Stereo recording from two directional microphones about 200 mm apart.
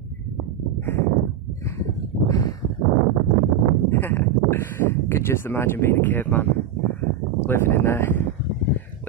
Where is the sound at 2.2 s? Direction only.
15° left (ahead or behind).